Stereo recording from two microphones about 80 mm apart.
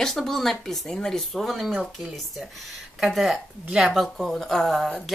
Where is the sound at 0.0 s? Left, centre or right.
Centre.